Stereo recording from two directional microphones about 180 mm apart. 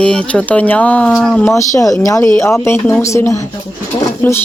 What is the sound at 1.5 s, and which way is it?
Speech, 15° left (ahead or behind).